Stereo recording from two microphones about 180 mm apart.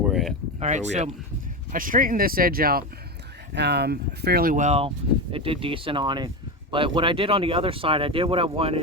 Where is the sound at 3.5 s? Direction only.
70° right (ahead or behind).